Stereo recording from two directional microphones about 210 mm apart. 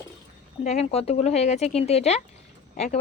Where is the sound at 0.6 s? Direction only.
30° left (ahead or behind).